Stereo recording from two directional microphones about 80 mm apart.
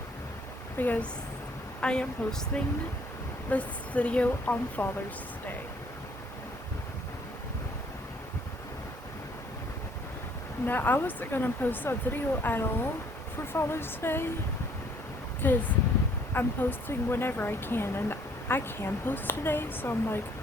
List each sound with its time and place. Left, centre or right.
0.8 s a woman's voice: left
10.7 s speech: left
15.4 s speech: left